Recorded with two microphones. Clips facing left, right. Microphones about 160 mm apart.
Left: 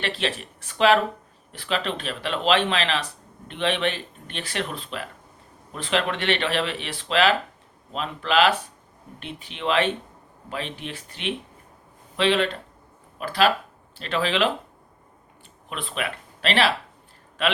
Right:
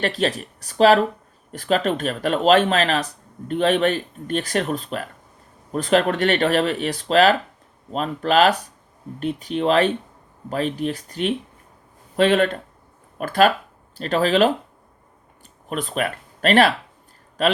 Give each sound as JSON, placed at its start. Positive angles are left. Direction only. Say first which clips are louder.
{"t": 0.0, "sound": "speech", "louder": "right 6 dB", "side_deg": -40}
{"t": 15.7, "sound": "speech", "louder": "right 6 dB", "side_deg": -45}